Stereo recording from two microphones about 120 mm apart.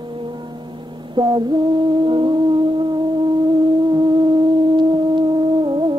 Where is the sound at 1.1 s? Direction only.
40° right (ahead or behind).